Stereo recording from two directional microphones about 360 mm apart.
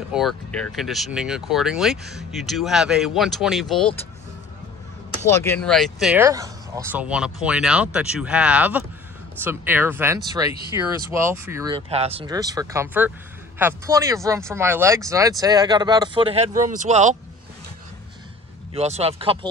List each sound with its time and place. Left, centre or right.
0.1 s speech: centre
5.3 s speech: centre
18.7 s speech: centre